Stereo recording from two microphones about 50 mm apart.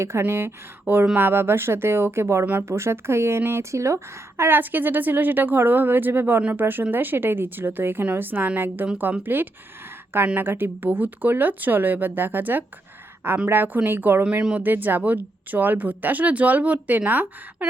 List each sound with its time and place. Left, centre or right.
0.0 s a woman's voice: right